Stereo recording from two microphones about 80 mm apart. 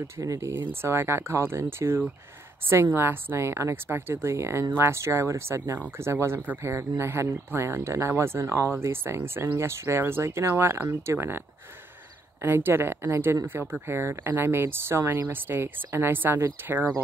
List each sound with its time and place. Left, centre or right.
0.2 s speech: right
0.5 s speech: right